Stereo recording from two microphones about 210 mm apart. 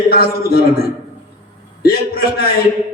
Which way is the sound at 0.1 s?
45° left (ahead or behind).